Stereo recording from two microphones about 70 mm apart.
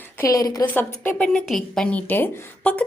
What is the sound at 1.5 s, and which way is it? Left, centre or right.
Speech, centre.